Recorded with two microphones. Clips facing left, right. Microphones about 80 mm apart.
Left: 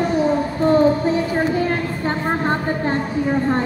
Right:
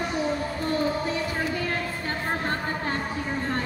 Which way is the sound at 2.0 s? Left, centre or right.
Left.